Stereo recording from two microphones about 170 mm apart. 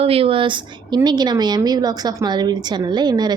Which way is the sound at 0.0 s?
35° right (ahead or behind).